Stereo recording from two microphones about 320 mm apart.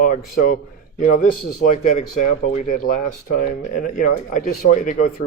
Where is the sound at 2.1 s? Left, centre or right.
Left.